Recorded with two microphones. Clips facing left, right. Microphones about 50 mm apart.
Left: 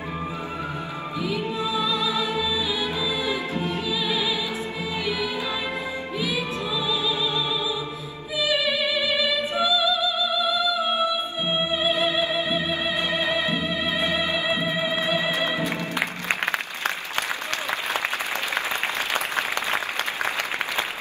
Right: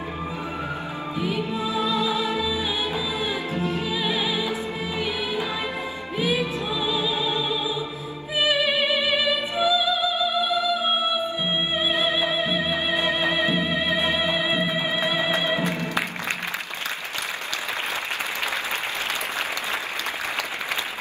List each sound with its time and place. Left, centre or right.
1.2 s music: right
3.9 s music: right
6.1 s music: right
8.4 s opera: right
11.9 s music: right